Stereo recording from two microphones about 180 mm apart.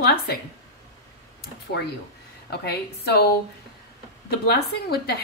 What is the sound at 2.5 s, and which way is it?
Speech, 65° left (ahead or behind).